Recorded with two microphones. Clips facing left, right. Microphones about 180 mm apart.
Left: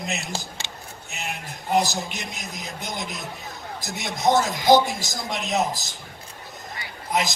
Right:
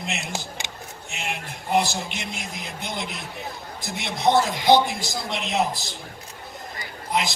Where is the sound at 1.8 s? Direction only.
40° left (ahead or behind).